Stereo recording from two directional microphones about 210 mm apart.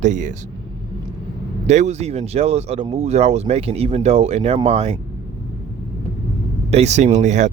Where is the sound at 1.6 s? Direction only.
35° right (ahead or behind).